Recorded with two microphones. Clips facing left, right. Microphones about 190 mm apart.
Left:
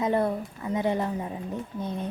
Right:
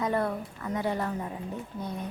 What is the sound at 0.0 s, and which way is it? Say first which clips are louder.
A woman's voice: left 3 dB; 20° left (ahead or behind).